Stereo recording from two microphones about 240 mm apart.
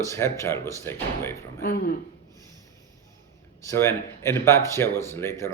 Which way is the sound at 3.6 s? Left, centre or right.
Centre.